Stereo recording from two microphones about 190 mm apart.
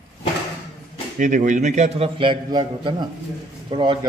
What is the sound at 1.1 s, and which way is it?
A man's voice, 40° right (ahead or behind).